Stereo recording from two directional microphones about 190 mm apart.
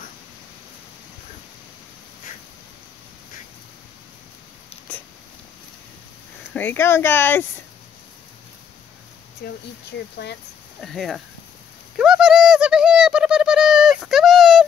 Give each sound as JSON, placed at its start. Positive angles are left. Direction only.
{"t": 6.5, "sound": "speech", "side_deg": 10}
{"t": 9.4, "sound": "speech", "side_deg": 60}
{"t": 10.8, "sound": "speech", "side_deg": 0}
{"t": 12.0, "sound": "bird", "side_deg": -5}